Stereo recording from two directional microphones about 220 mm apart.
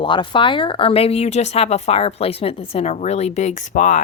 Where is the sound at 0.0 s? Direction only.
20° left (ahead or behind).